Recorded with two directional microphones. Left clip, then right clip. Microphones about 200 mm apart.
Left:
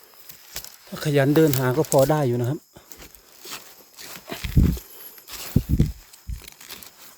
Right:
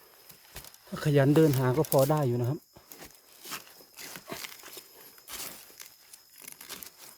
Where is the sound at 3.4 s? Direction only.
Centre (ahead or behind).